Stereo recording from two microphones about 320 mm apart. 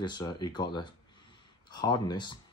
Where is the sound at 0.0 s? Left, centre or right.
Centre.